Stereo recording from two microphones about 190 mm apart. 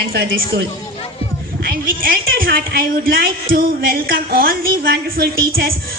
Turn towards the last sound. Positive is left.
turn(degrees=-55)  # may be behind; listen again after turning